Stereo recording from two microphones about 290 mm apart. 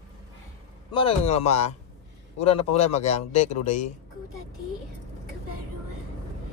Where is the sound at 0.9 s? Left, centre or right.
Left.